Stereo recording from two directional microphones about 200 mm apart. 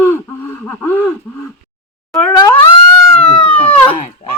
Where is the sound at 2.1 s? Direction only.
Centre (ahead or behind).